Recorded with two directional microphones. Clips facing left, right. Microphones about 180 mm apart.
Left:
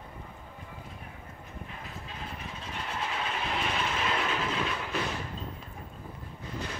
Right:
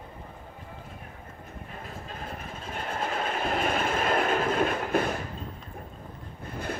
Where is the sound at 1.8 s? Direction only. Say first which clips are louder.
Right 5 dB; 50° right (ahead or behind).